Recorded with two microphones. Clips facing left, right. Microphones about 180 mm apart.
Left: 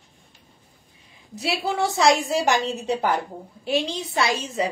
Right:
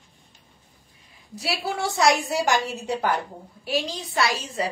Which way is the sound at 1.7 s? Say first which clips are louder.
Left 2 dB; 20° left (ahead or behind).